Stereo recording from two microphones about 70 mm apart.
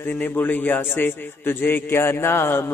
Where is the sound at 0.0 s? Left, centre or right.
Left.